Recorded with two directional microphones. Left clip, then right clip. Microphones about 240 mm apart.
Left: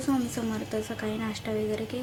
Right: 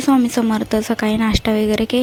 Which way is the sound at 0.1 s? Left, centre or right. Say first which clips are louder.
Right 14 dB; right.